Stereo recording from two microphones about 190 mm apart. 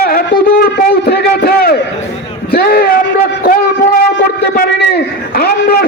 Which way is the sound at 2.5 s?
50° left (ahead or behind).